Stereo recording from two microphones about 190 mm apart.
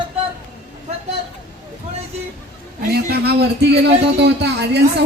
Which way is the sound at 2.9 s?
55° right (ahead or behind).